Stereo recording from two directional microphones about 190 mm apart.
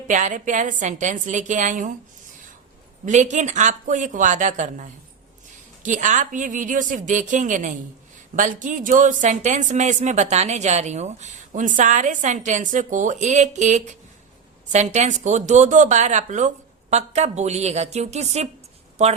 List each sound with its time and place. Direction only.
0.1 s a woman's voice: 40° right (ahead or behind)
3.1 s a woman's voice: 40° right (ahead or behind)